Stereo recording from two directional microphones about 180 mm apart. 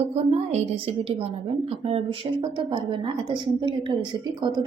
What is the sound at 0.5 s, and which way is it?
A woman's voice, 30° right (ahead or behind).